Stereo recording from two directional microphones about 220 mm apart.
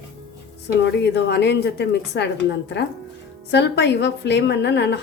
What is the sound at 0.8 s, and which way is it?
A woman's voice, 50° left (ahead or behind).